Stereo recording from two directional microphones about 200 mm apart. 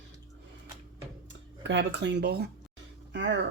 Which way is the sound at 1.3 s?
65° right (ahead or behind).